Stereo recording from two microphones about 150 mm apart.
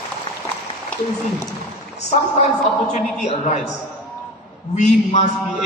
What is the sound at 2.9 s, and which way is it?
Speech, 50° left (ahead or behind).